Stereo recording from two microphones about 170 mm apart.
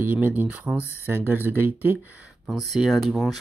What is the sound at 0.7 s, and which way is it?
Speech, 15° left (ahead or behind).